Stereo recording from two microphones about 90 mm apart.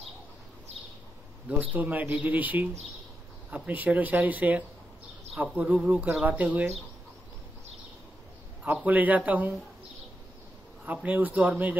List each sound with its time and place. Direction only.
1.6 s speech: 15° right (ahead or behind)
8.8 s speech: 20° right (ahead or behind)
10.9 s speech: 20° right (ahead or behind)